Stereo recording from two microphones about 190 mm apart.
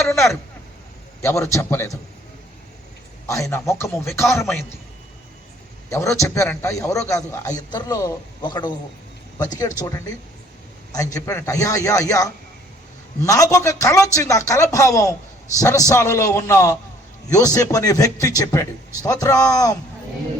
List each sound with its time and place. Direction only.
0.0 s a sound: 15° left (ahead or behind)
1.2 s a man's voice: 15° left (ahead or behind)
3.2 s a man's voice: 15° left (ahead or behind)
5.9 s a man's voice: 15° left (ahead or behind)